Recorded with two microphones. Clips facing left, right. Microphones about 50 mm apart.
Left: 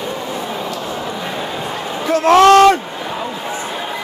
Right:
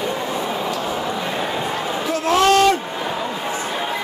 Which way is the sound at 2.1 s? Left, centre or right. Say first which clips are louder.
Left 8 dB; left.